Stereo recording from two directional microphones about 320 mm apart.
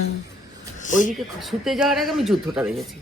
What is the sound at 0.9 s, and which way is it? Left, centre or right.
Speech, left.